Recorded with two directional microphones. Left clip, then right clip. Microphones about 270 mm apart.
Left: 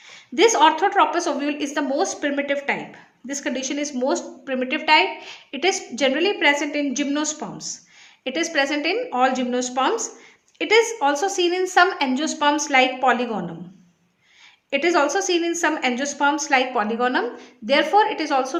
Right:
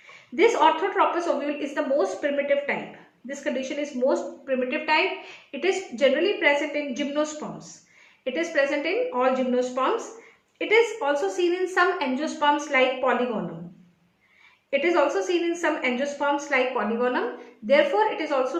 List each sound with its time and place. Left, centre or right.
0.3 s a woman's voice: left
14.7 s a woman's voice: left